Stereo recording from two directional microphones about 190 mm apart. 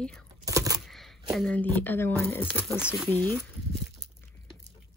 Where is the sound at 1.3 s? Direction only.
5° left (ahead or behind).